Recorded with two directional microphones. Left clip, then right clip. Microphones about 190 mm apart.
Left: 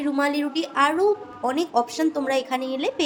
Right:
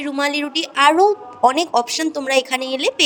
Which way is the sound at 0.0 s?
40° right (ahead or behind).